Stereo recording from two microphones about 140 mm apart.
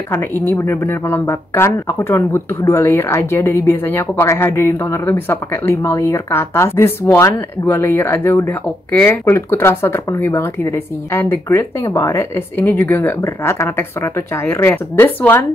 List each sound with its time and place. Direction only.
0.1 s speech: 15° left (ahead or behind)